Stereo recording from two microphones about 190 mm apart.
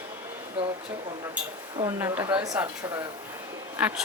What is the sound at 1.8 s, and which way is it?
Speech, 15° right (ahead or behind).